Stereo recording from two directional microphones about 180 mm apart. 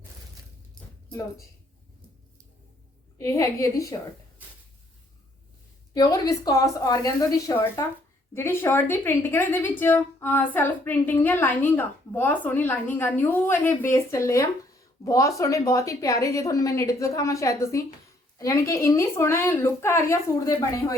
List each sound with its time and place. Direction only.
3.2 s a woman's voice: 15° left (ahead or behind)
5.9 s a woman's voice: 20° left (ahead or behind)